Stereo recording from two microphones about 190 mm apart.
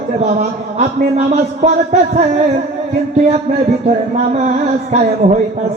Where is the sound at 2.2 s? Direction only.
40° right (ahead or behind).